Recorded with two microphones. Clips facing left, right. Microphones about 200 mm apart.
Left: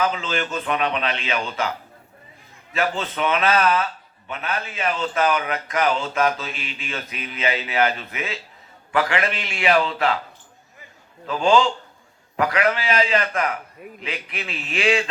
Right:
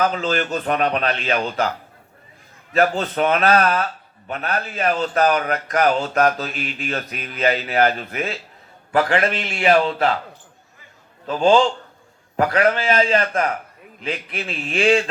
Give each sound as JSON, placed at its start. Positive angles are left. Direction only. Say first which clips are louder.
{"t": 0.0, "sound": "a man's voice", "louder": "right 3 dB", "side_deg": -40}
{"t": 2.7, "sound": "a man's voice", "louder": "right 6 dB", "side_deg": -40}
{"t": 11.3, "sound": "a man's voice", "louder": "right 3 dB", "side_deg": -40}